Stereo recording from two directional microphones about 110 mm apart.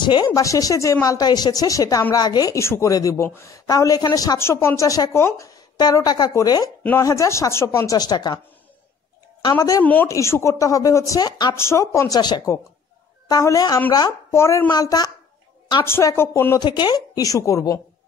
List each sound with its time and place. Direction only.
0.0 s a woman's voice: 40° left (ahead or behind)
9.4 s a woman's voice: 35° left (ahead or behind)
11.5 s speech: 25° left (ahead or behind)
12.2 s a woman's voice: 40° left (ahead or behind); by 14.7 s 25° left (ahead or behind)
14.7 s a woman's voice: 35° left (ahead or behind)
15.8 s speech: 25° left (ahead or behind)
16.5 s a woman's voice: 40° left (ahead or behind)